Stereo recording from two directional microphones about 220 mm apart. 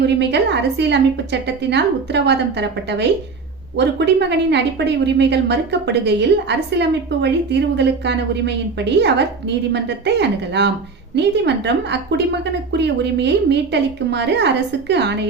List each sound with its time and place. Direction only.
0.2 s a woman's voice: 50° right (ahead or behind)